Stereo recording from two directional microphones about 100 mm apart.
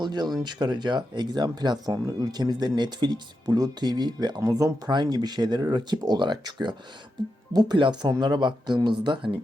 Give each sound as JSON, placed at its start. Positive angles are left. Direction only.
{"t": 0.0, "sound": "speech", "side_deg": -45}
{"t": 4.4, "sound": "speech", "side_deg": -30}
{"t": 4.9, "sound": "speech", "side_deg": -45}